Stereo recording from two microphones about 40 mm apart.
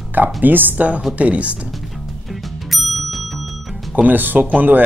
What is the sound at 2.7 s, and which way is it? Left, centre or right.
Bicycle bell, centre.